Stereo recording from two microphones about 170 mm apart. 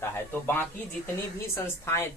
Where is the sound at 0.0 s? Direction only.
15° left (ahead or behind).